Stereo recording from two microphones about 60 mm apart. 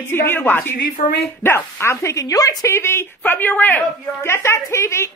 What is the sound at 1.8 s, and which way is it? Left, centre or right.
Speech, left.